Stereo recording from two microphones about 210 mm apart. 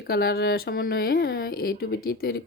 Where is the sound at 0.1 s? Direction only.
50° left (ahead or behind).